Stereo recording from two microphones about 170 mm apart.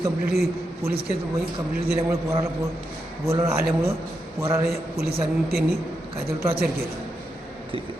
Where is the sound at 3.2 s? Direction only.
15° right (ahead or behind).